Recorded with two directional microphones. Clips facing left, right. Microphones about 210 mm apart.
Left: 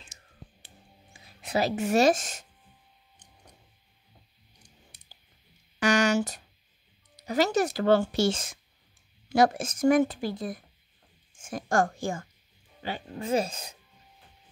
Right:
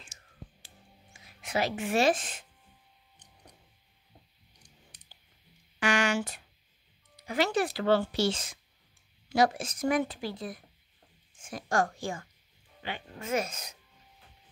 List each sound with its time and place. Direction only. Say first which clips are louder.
1.1 s speech: left 3 dB; 35° left (ahead or behind)
5.1 s clicking: left 2 dB; 40° left (ahead or behind)
5.8 s a sound: left 4 dB; 40° left (ahead or behind)
7.2 s a woman's voice: left 3 dB; 40° left (ahead or behind)
12.8 s speech: left 5 dB; 35° left (ahead or behind)